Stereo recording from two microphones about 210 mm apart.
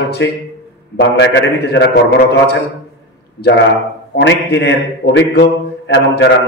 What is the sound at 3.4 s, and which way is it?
A man's voice, 55° left (ahead or behind).